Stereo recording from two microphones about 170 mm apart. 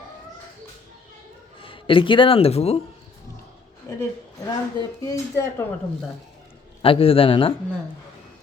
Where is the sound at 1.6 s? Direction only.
30° left (ahead or behind).